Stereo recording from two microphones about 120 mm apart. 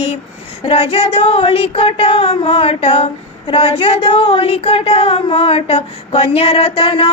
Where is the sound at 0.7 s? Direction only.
55° left (ahead or behind).